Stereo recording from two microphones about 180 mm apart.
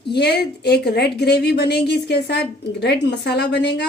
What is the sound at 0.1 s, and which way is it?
A woman's voice, 65° left (ahead or behind).